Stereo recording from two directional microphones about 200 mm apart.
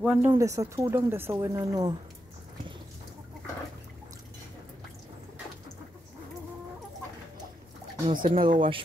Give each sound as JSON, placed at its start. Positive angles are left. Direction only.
{"t": 0.0, "sound": "speech", "side_deg": -5}
{"t": 0.3, "sound": "speech", "side_deg": -15}
{"t": 8.2, "sound": "speech", "side_deg": -45}
{"t": 8.5, "sound": "speech", "side_deg": -25}